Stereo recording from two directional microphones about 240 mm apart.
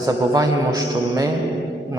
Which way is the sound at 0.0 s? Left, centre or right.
Centre.